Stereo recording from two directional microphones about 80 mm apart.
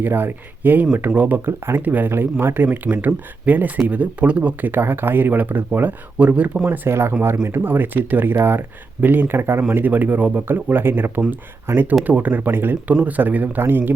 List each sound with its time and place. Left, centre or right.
0.0 s speech: right
6.7 s speech: right